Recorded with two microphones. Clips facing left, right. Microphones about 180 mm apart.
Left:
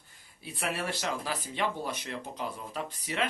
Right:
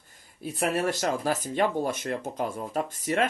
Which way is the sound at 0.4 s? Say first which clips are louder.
Right 8 dB; 45° right (ahead or behind).